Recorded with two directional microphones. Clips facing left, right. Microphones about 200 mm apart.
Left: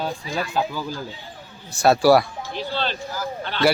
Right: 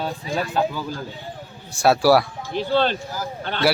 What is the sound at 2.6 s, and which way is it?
Speech, 50° right (ahead or behind).